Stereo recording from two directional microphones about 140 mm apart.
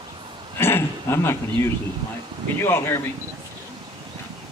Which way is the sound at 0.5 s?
15° left (ahead or behind).